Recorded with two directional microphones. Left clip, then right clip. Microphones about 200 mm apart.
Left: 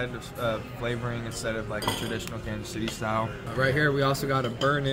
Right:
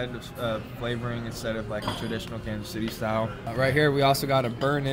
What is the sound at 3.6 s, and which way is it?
Speech, 35° right (ahead or behind).